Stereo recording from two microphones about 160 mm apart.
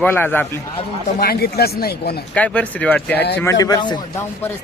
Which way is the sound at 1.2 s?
75° left (ahead or behind).